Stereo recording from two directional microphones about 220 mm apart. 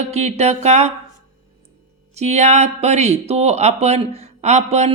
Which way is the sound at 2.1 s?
30° right (ahead or behind).